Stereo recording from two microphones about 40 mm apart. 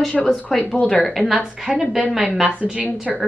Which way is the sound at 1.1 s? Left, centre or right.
Centre.